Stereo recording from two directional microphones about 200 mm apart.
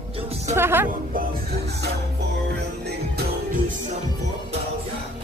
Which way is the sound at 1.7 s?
55° right (ahead or behind).